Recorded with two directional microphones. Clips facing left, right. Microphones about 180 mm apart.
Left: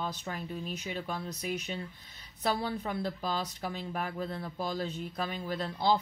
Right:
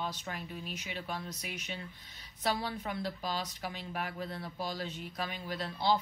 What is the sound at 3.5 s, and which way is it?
Speech, 40° left (ahead or behind).